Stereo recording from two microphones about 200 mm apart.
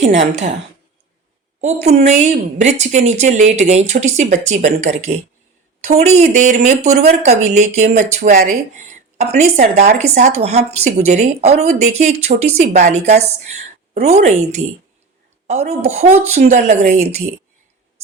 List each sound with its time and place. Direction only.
1.6 s a woman's voice: 35° right (ahead or behind)